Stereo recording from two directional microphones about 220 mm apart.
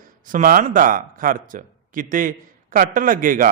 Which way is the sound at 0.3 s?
40° right (ahead or behind).